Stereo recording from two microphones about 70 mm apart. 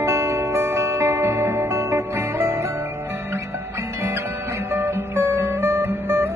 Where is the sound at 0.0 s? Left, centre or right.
Right.